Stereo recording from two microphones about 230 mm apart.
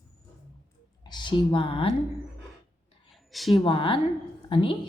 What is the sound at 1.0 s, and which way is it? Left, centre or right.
Speech, centre.